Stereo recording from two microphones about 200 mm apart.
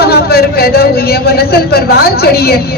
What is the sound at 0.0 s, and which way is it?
A man's voice, 50° left (ahead or behind).